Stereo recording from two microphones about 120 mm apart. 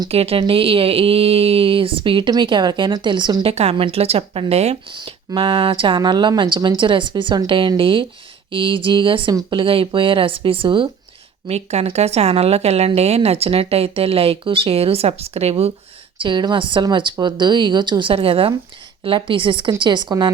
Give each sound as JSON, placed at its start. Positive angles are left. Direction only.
{"t": 0.1, "sound": "a woman's voice", "side_deg": -55}
{"t": 3.4, "sound": "a woman's voice", "side_deg": -60}
{"t": 4.9, "sound": "speech", "side_deg": -40}
{"t": 11.4, "sound": "a woman's voice", "side_deg": -60}
{"t": 16.1, "sound": "a woman's voice", "side_deg": -40}